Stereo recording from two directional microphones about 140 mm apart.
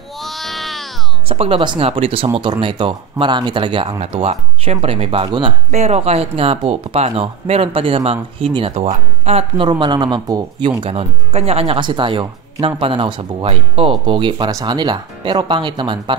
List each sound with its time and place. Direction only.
0.2 s baby cry: centre (ahead or behind)
1.3 s speech: 45° right (ahead or behind)
4.0 s speech: 45° right (ahead or behind)
9.7 s speech: 30° right (ahead or behind)
10.8 s speech: 45° right (ahead or behind)